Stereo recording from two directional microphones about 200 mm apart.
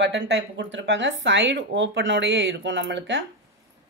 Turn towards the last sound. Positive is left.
turn(degrees=-60)  # may be behind; listen again after turning